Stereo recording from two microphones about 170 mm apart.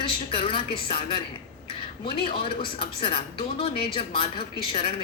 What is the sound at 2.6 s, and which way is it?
A woman's voice, 30° left (ahead or behind).